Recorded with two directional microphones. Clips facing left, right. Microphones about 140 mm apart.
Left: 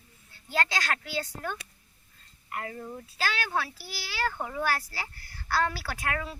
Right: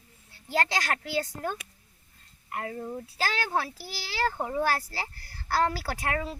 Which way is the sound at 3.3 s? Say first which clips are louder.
Right 2 dB; 40° right (ahead or behind).